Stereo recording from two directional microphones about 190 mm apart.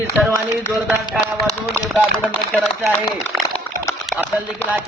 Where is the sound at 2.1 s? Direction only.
10° left (ahead or behind).